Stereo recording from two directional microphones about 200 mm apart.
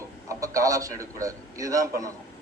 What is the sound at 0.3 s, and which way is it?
A man's voice, 15° right (ahead or behind).